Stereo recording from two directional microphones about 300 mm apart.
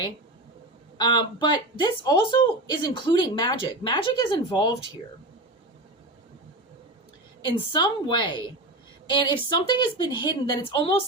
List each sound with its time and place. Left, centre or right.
0.9 s speech: centre
7.7 s speech: centre